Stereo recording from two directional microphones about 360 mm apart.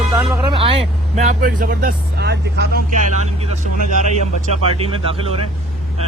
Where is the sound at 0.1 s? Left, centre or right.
Centre; by 2.6 s right.